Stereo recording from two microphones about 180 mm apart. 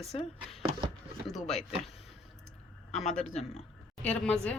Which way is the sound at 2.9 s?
40° left (ahead or behind).